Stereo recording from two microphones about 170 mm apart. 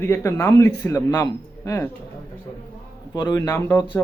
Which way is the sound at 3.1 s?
25° left (ahead or behind).